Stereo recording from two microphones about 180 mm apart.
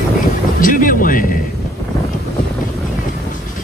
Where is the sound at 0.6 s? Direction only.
50° left (ahead or behind).